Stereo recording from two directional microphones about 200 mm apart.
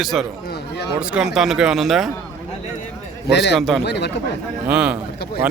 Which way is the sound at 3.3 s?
60° left (ahead or behind).